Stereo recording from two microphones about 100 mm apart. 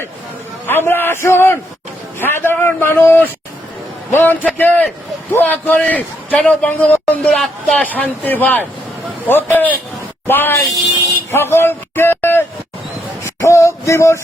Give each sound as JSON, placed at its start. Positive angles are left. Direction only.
{"t": 0.7, "sound": "a man's voice", "side_deg": 20}
{"t": 7.3, "sound": "a man's voice", "side_deg": 5}
{"t": 13.2, "sound": "a sound", "side_deg": 30}